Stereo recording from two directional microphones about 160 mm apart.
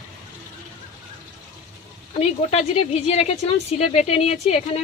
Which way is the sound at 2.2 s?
40° left (ahead or behind).